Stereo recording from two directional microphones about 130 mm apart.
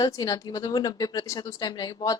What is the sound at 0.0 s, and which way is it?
A woman's voice, 30° left (ahead or behind).